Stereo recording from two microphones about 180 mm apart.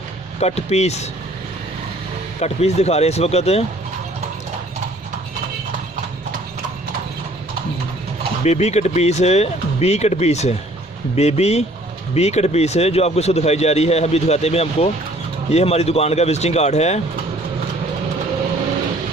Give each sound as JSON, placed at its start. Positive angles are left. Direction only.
{"t": 0.3, "sound": "speech", "side_deg": 35}
{"t": 2.4, "sound": "speech", "side_deg": 35}
{"t": 8.4, "sound": "speech", "side_deg": 35}